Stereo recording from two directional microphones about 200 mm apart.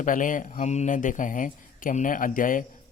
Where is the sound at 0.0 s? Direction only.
40° left (ahead or behind).